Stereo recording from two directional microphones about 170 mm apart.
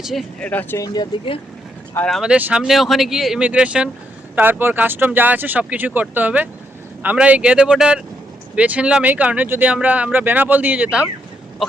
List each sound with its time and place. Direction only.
0.0 s speech: centre (ahead or behind)
0.9 s speech: 30° left (ahead or behind)
2.0 s speech: centre (ahead or behind)